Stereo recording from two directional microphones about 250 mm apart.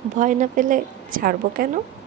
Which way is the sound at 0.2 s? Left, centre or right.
Right.